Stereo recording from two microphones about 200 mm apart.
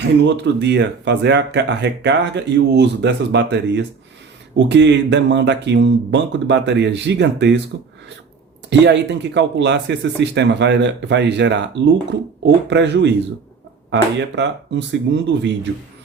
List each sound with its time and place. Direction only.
0.0 s speech: 60° right (ahead or behind)
8.7 s speech: 60° right (ahead or behind)